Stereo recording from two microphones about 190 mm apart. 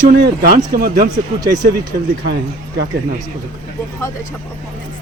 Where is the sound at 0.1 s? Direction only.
50° right (ahead or behind).